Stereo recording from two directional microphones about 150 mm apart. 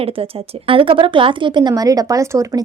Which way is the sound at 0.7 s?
35° right (ahead or behind).